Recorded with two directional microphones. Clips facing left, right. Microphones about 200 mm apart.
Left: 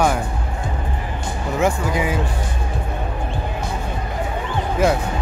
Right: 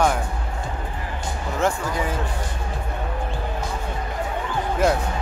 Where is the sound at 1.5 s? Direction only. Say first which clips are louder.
Left 4 dB; 15° left (ahead or behind).